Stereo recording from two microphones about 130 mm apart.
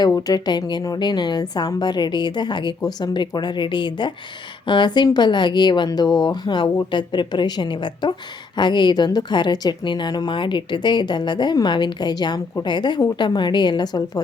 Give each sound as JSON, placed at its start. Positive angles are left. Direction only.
{"t": 0.1, "sound": "a woman's voice", "side_deg": 30}